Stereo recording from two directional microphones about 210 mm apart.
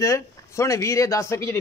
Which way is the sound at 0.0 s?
15° left (ahead or behind).